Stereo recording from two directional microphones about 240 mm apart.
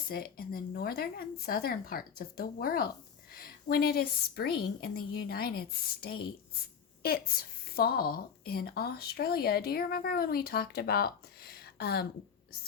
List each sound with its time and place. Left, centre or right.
0.1 s a woman's voice: left